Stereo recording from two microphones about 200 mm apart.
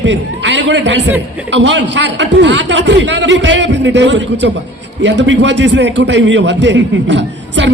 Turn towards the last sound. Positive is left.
turn(degrees=-65)  # may be behind; listen again after turning